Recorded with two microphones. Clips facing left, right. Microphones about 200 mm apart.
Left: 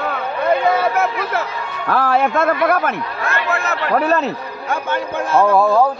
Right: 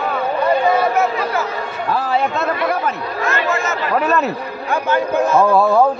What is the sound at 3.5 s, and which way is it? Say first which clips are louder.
Speech: even; 65° left (ahead or behind).